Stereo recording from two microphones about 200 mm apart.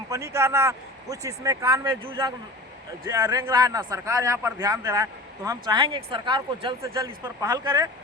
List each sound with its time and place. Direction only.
0.1 s speech: 15° right (ahead or behind)